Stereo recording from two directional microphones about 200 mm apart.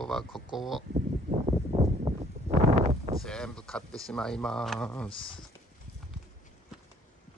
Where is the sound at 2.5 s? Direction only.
35° right (ahead or behind).